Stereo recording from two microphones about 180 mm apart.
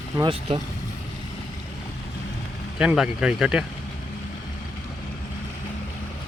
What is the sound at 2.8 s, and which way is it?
Speech, 5° right (ahead or behind).